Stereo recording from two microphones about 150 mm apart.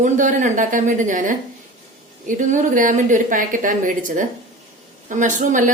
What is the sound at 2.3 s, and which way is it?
A woman's voice, 55° right (ahead or behind).